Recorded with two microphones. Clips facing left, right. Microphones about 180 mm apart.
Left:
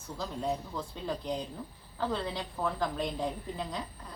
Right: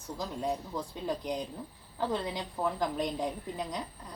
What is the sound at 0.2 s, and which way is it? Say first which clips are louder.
A woman's voice: even; 15° right (ahead or behind).